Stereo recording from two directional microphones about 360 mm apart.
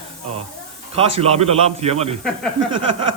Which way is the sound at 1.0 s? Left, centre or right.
Centre.